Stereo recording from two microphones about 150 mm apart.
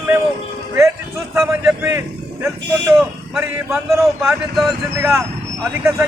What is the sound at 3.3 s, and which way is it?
A man's voice, centre (ahead or behind).